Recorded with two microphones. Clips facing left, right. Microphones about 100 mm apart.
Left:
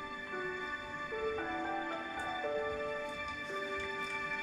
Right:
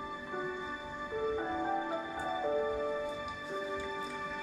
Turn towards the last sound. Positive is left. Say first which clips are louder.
# right 2 dB
turn(degrees=-10)  # may be behind; listen again after turning